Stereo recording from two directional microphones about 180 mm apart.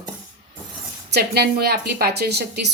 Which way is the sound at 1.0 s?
65° right (ahead or behind).